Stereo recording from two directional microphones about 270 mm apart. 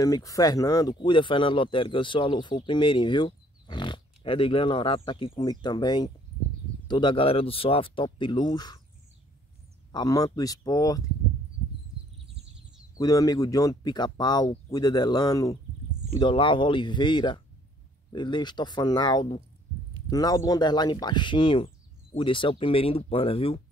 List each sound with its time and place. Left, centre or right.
0.0 s speech: centre
9.9 s speech: centre
12.9 s speech: centre